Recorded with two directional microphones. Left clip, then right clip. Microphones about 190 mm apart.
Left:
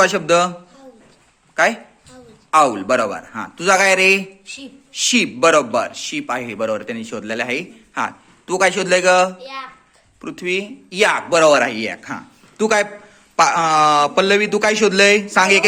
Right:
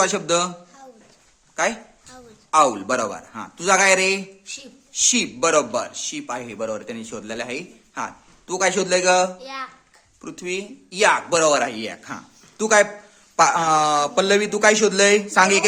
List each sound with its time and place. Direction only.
0.0 s a man's voice: 5° right (ahead or behind)
1.6 s a man's voice: 5° right (ahead or behind)
9.4 s a child's voice: 20° right (ahead or behind)
10.2 s a man's voice: 5° right (ahead or behind)